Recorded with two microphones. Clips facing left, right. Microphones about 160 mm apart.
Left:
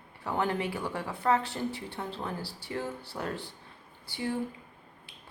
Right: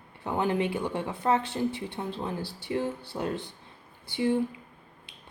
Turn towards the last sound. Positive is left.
turn(degrees=-20)  # may be behind; listen again after turning